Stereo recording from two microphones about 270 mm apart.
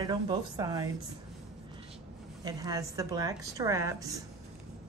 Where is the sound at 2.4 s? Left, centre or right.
Centre.